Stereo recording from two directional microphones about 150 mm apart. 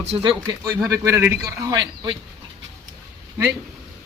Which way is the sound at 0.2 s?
30° right (ahead or behind).